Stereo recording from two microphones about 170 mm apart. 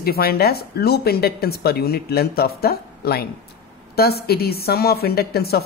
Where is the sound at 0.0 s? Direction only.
65° left (ahead or behind).